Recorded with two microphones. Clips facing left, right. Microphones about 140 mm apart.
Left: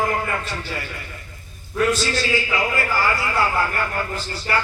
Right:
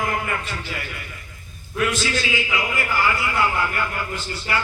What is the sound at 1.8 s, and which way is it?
Speech, 35° left (ahead or behind).